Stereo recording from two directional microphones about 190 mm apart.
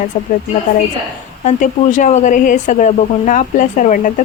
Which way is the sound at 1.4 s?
40° left (ahead or behind).